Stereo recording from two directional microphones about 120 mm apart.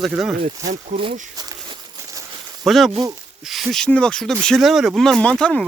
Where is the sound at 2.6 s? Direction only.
Centre (ahead or behind).